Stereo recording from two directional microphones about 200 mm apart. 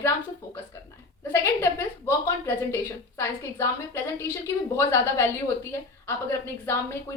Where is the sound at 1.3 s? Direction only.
10° left (ahead or behind).